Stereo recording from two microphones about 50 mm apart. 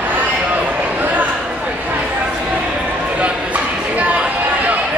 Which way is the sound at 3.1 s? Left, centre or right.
Right.